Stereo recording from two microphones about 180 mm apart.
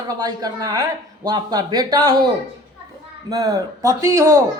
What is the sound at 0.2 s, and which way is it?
Speech, 20° right (ahead or behind).